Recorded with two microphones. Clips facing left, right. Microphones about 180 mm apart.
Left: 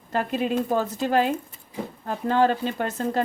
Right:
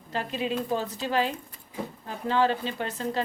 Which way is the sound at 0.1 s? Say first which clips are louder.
Left 5 dB; 50° left (ahead or behind).